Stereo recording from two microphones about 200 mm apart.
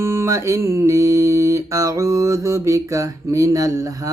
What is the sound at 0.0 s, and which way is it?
Mantra, 15° right (ahead or behind).